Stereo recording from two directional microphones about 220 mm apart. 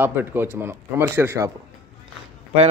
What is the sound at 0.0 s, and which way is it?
Speech, 10° right (ahead or behind).